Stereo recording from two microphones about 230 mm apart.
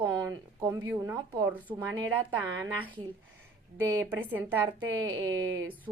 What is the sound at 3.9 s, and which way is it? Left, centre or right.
Speech, centre.